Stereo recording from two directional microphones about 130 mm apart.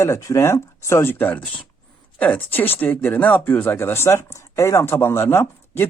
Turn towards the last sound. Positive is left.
turn(degrees=15)  # may be behind; listen again after turning